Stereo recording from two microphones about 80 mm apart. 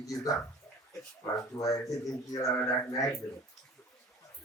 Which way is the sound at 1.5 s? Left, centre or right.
Left.